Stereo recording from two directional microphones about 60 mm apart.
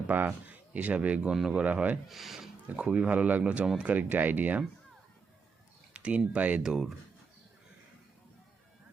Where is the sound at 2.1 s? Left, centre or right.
Centre.